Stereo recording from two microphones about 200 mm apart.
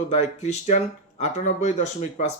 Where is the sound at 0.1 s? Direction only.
35° left (ahead or behind).